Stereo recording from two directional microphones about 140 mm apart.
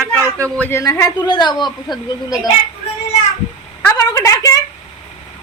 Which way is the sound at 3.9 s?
25° left (ahead or behind).